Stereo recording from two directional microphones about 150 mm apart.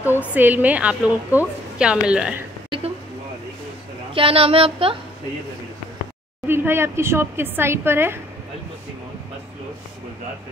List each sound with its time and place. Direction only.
0.0 s a woman's voice: 10° right (ahead or behind)
4.1 s speech: 40° right (ahead or behind)
6.4 s a woman's voice: 15° right (ahead or behind)